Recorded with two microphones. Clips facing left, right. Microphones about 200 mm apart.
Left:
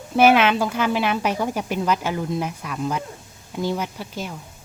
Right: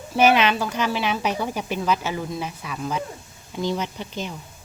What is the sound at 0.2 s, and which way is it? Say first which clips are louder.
Speech: left 2 dB; 10° left (ahead or behind).